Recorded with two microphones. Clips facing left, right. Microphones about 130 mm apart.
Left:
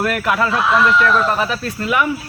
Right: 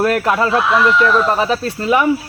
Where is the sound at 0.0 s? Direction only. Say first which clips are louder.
Right 3 dB; 30° right (ahead or behind).